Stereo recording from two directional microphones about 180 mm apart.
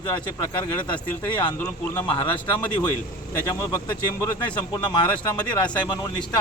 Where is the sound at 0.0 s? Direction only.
25° left (ahead or behind).